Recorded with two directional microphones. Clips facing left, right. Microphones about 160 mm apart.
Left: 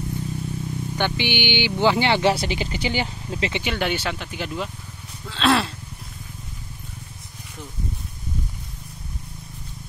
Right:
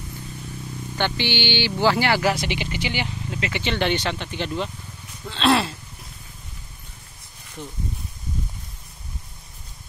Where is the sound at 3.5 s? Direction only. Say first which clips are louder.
Right 4 dB; 10° left (ahead or behind).